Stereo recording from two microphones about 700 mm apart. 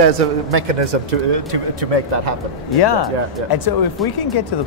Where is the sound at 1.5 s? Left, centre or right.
Right.